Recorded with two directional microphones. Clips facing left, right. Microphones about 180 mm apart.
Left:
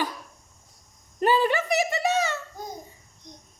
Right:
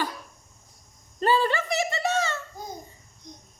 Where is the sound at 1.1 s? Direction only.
15° left (ahead or behind).